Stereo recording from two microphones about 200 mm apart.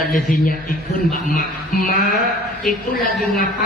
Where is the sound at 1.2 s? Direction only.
45° left (ahead or behind).